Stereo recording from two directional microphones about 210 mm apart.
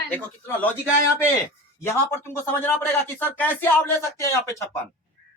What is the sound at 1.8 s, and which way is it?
Speech, 10° left (ahead or behind).